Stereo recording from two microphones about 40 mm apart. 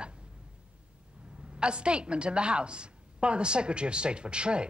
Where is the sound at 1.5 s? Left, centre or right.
Right.